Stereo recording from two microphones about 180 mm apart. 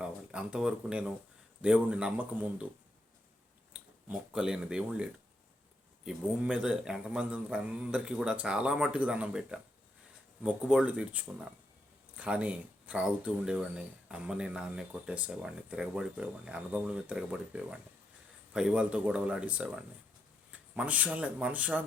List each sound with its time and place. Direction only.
0.0 s speech: 5° right (ahead or behind)
3.7 s speech: 5° right (ahead or behind)
6.1 s speech: 5° right (ahead or behind)